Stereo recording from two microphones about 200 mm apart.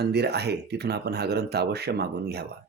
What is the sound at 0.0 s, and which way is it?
Speech, 55° right (ahead or behind).